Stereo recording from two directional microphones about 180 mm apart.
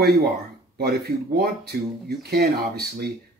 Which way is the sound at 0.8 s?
60° right (ahead or behind).